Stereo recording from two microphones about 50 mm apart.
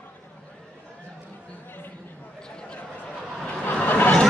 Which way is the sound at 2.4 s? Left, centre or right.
Centre.